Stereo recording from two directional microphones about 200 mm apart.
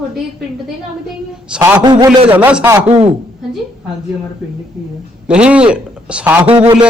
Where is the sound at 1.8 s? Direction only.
20° right (ahead or behind).